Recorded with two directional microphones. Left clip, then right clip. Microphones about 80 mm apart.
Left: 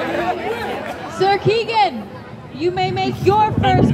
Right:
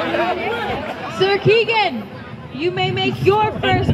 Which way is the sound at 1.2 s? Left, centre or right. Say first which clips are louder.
Right 1 dB; left.